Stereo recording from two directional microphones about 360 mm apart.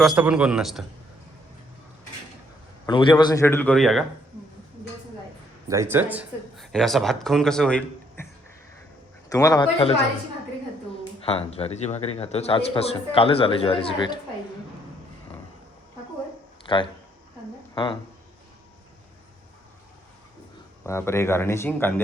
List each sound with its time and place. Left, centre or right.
0.0 s speech: centre
2.8 s a man's voice: centre
5.6 s speech: centre
9.3 s a man's voice: centre
11.2 s a man's voice: centre
16.6 s speech: centre
20.8 s a man's voice: centre